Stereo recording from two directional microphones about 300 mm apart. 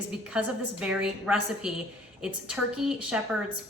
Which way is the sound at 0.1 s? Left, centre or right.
Centre.